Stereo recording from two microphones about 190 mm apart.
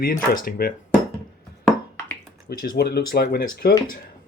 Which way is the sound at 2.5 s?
55° left (ahead or behind).